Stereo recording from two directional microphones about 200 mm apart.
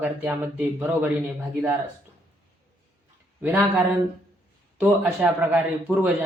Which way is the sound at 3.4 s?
5° right (ahead or behind).